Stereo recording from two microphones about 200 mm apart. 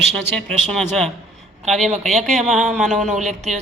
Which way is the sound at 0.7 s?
Centre (ahead or behind).